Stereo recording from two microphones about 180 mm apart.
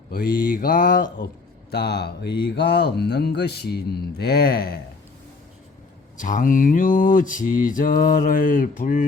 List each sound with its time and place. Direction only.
0.5 s mantra: 50° left (ahead or behind)
1.7 s speech: 65° left (ahead or behind)
6.1 s mantra: 45° left (ahead or behind)